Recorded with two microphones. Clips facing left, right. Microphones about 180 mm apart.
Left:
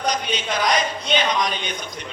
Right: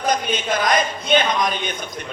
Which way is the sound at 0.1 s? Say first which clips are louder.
Right 6 dB; 50° right (ahead or behind).